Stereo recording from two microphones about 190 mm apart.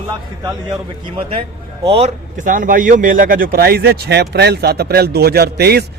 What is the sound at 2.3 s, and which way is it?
A man's voice, 45° right (ahead or behind).